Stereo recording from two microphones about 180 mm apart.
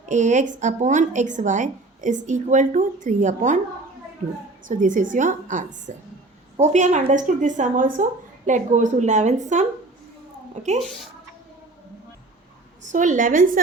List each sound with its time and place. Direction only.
0.0 s a woman's voice: 45° right (ahead or behind)
4.7 s a woman's voice: 45° right (ahead or behind)
12.8 s a woman's voice: 45° right (ahead or behind)